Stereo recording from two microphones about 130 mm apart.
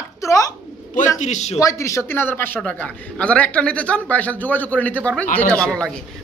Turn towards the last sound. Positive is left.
turn(degrees=5)  # may be behind; listen again after turning